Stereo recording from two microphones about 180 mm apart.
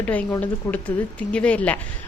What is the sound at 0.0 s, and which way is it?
Speech, 10° left (ahead or behind).